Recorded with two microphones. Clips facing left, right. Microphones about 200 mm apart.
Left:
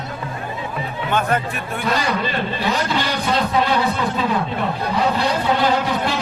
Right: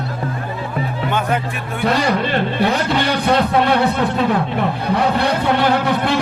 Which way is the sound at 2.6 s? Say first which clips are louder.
Right 3 dB; 60° right (ahead or behind).